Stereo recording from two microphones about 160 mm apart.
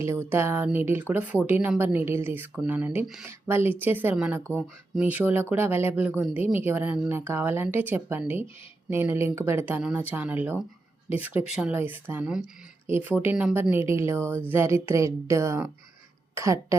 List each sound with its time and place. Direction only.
0.0 s speech: 15° right (ahead or behind)